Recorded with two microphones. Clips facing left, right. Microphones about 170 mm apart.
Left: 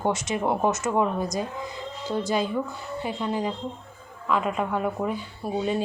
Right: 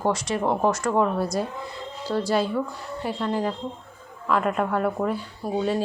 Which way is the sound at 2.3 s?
Centre (ahead or behind).